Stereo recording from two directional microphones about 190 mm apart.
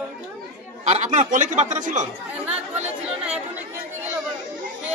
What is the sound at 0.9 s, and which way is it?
Speech, 40° right (ahead or behind).